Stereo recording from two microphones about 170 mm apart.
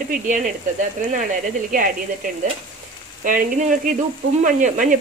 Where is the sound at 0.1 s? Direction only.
50° right (ahead or behind).